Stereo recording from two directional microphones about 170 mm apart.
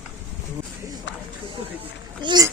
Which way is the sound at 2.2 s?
25° right (ahead or behind).